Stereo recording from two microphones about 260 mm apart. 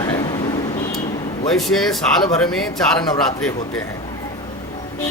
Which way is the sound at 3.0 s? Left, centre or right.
Centre.